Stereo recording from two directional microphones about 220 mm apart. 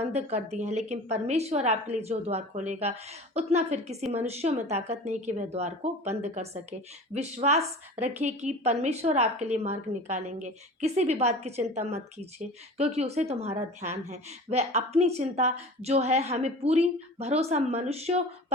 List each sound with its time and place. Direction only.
0.0 s speech: 30° right (ahead or behind)